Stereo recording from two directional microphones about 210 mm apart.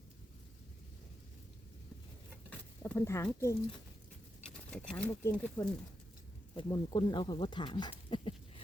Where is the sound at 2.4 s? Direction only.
10° left (ahead or behind).